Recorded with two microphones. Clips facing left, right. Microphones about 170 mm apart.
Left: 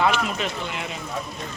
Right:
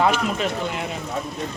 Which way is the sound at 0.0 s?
40° right (ahead or behind).